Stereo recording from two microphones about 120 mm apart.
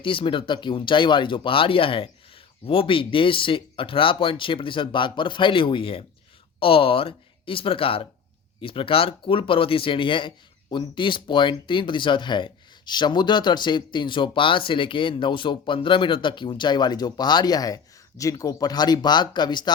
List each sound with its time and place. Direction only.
0.0 s speech: 45° left (ahead or behind)